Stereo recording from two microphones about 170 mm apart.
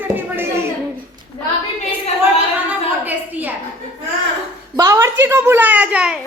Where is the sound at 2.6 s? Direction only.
10° right (ahead or behind).